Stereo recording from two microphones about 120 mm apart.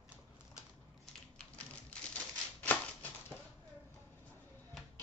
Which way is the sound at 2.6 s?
15° left (ahead or behind).